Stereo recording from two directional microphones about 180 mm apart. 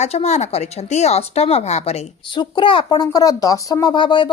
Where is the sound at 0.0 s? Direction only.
35° left (ahead or behind).